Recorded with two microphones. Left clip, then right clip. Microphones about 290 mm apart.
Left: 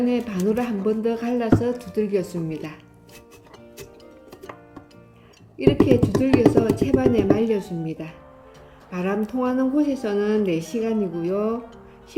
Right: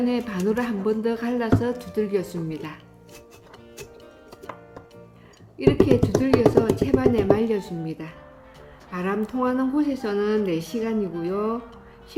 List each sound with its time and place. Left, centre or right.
0.0 s speech: centre
5.5 s speech: centre